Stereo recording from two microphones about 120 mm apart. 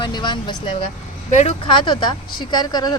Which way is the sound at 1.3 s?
85° left.